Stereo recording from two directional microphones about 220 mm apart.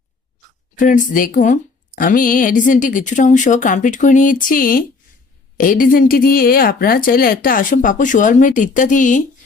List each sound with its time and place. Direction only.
0.8 s a woman's voice: 35° left (ahead or behind)